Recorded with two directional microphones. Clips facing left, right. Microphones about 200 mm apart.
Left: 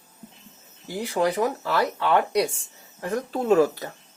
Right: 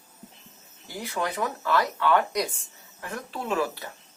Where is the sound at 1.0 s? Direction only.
30° left (ahead or behind).